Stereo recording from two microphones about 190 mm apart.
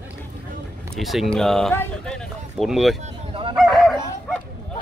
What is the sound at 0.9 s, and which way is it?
Speech, centre (ahead or behind).